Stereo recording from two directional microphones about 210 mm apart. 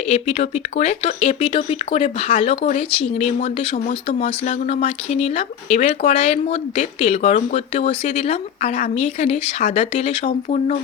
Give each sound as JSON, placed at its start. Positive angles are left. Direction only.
{"t": 0.1, "sound": "speech", "side_deg": 30}